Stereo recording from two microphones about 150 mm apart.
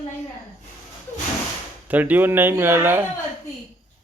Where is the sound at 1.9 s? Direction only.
10° right (ahead or behind).